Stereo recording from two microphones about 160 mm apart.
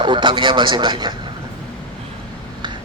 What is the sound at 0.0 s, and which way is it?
Speech, 30° right (ahead or behind).